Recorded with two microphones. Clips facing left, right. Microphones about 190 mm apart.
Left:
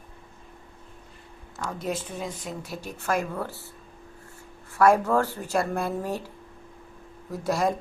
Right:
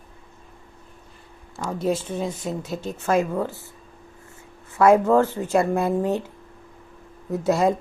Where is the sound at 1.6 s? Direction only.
25° right (ahead or behind).